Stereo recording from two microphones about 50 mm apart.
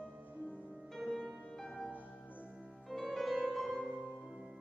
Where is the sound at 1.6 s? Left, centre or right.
Centre.